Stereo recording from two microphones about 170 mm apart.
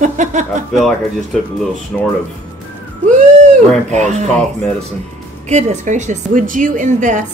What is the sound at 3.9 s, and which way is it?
Speech, 45° right (ahead or behind).